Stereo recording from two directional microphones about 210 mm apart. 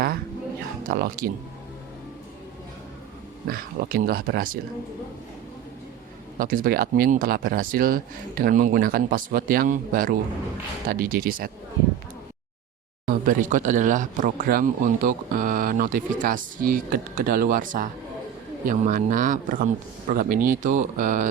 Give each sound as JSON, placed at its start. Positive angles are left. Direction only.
{"t": 0.9, "sound": "speech", "side_deg": -45}
{"t": 3.4, "sound": "speech", "side_deg": -45}
{"t": 6.4, "sound": "speech", "side_deg": -40}
{"t": 13.1, "sound": "speech", "side_deg": -40}